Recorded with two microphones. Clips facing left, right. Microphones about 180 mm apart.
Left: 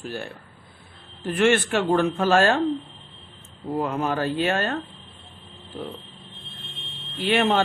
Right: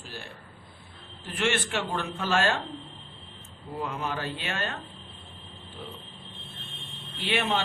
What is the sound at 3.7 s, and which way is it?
Speech, 45° left (ahead or behind).